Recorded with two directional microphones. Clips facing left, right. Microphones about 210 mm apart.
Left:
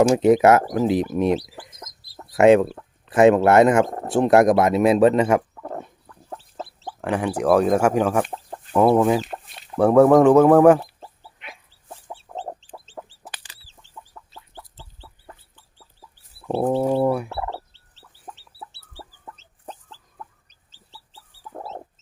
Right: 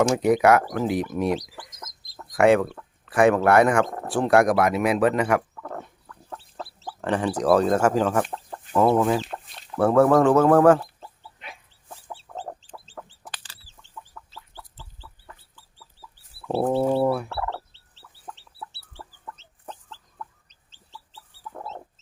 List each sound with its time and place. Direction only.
0.1 s speech: 25° left (ahead or behind)
1.9 s chicken: 10° left (ahead or behind)
2.4 s speech: 20° left (ahead or behind)
4.0 s a sound: 20° left (ahead or behind)
7.0 s speech: 10° left (ahead or behind)
8.7 s chicken: 10° left (ahead or behind)
9.0 s speech: 15° left (ahead or behind)
9.2 s chicken: 5° left (ahead or behind)
9.7 s speech: 15° left (ahead or behind)
12.1 s chicken: 25° left (ahead or behind)
13.1 s chicken: 10° left (ahead or behind); by 15.6 s 30° left (ahead or behind)
16.6 s speech: 10° left (ahead or behind)
17.1 s turkey: 15° left (ahead or behind)
17.7 s chicken: 10° left (ahead or behind)